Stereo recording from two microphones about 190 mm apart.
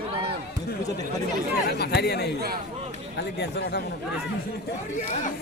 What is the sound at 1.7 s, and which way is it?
Speech, 60° left (ahead or behind).